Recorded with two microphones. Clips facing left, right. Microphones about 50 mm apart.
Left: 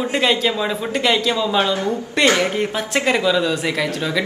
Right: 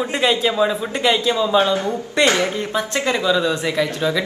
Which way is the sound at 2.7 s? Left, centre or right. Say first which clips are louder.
Right 1 dB; left.